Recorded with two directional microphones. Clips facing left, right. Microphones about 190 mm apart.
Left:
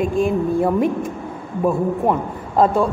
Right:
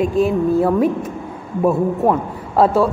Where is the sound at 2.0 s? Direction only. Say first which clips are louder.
Right 2 dB; 5° right (ahead or behind).